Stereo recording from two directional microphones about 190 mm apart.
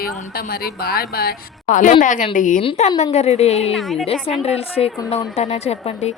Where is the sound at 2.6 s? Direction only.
30° left (ahead or behind).